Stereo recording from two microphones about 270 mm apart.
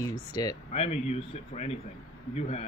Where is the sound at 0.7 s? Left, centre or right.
Left.